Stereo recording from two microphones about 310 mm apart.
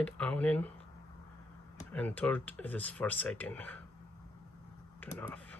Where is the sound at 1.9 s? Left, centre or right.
Centre.